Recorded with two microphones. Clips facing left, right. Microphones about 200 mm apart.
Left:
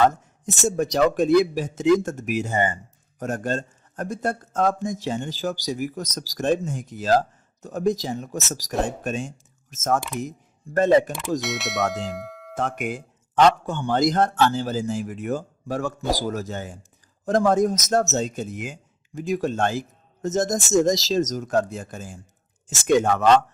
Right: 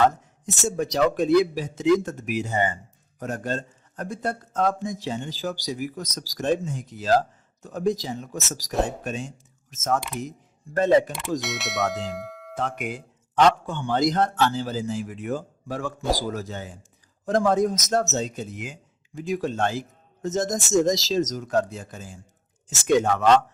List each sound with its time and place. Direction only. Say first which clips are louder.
0.4 s a man's voice: left 3 dB; 45° left (ahead or behind)
11.3 s speech: left 1 dB; centre (ahead or behind)
12.5 s a man's voice: left 3 dB; 50° left (ahead or behind)